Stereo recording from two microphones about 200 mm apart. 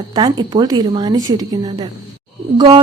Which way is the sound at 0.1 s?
20° right (ahead or behind).